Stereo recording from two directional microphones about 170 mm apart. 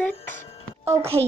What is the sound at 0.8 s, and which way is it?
Speech, 15° right (ahead or behind).